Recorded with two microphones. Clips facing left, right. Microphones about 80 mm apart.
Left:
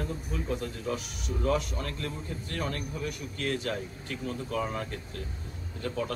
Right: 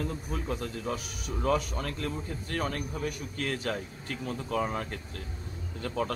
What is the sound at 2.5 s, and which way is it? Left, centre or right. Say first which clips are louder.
Speech: right 2 dB; right.